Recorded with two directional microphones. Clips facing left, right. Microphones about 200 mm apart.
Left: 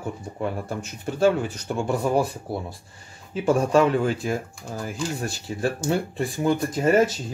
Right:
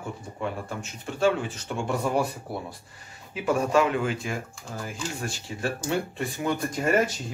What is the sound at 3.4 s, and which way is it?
Speech, 35° left (ahead or behind).